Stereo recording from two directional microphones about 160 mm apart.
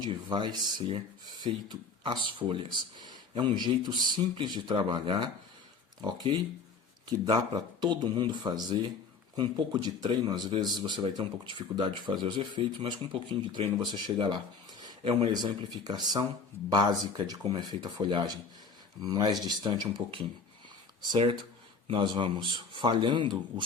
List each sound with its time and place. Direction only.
0.0 s speech: 30° right (ahead or behind)